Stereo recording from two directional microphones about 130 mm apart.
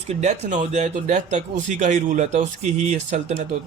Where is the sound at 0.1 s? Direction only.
60° right (ahead or behind).